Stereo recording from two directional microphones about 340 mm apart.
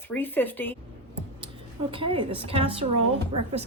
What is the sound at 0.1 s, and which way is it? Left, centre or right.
Speech, centre.